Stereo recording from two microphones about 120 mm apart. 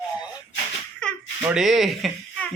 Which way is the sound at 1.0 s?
10° left (ahead or behind).